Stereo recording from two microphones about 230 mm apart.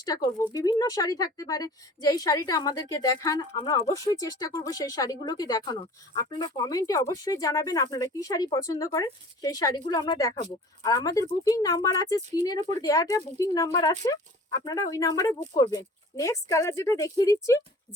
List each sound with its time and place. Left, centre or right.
0.0 s a woman's voice: centre